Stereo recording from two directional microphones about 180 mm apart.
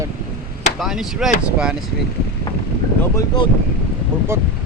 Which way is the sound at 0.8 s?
Centre (ahead or behind).